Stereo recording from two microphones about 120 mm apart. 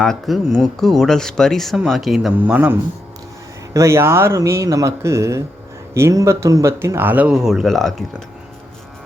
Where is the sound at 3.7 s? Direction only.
25° right (ahead or behind); by 8.2 s centre (ahead or behind).